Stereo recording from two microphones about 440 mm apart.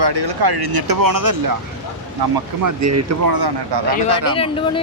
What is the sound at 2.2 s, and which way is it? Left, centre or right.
Speech, right.